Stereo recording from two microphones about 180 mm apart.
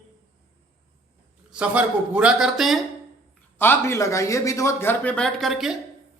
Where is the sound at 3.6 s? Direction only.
15° left (ahead or behind).